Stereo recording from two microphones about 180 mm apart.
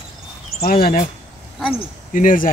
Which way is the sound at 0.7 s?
55° left (ahead or behind).